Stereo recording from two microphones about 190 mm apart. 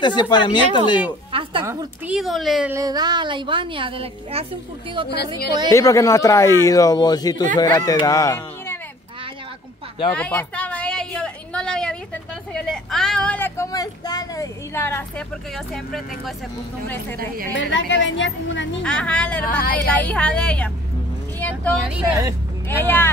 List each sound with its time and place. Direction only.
0.0 s speech: 25° left (ahead or behind)
1.3 s a woman's voice: 25° right (ahead or behind)
2.0 s speech: centre (ahead or behind)
2.7 s a woman's voice: 20° right (ahead or behind)
5.7 s speech: 15° left (ahead or behind)
10.1 s a sound: 5° left (ahead or behind)
17.6 s a woman's voice: 75° left (ahead or behind)
18.8 s speech: 5° left (ahead or behind)
21.4 s vehicle: 10° left (ahead or behind)
21.7 s speech: centre (ahead or behind)
22.7 s speech: 10° left (ahead or behind)